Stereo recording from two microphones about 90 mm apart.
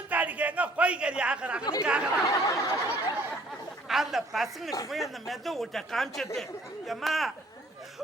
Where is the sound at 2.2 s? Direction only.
40° left (ahead or behind).